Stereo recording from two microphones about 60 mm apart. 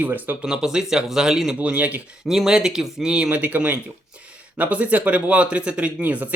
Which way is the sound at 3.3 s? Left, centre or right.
Right.